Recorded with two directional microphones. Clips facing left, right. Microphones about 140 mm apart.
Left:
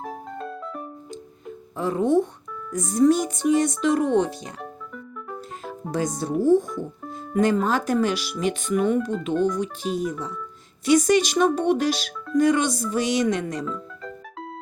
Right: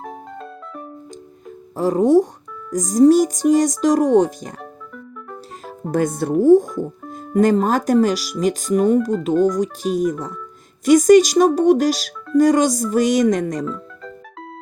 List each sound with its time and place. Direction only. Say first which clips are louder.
0.0 s music: even; centre (ahead or behind)
1.7 s speech: right 6 dB; 40° right (ahead or behind)
4.6 s music: right 1 dB; centre (ahead or behind)
5.6 s speech: right 6 dB; 50° right (ahead or behind)
6.4 s speech: right 7 dB; 45° right (ahead or behind)
13.7 s music: right 3 dB; centre (ahead or behind)